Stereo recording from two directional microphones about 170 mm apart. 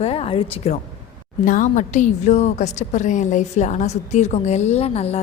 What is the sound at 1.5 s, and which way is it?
A woman's voice, 50° left (ahead or behind).